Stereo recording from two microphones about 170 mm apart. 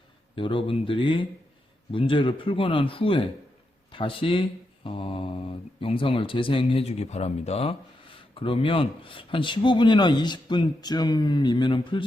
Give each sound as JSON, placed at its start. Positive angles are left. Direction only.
{"t": 0.3, "sound": "speech", "side_deg": 30}